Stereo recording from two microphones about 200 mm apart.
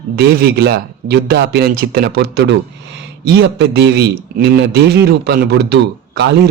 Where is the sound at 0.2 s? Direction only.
55° right (ahead or behind).